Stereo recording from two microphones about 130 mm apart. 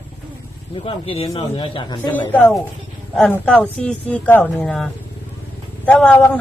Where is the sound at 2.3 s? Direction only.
5° left (ahead or behind).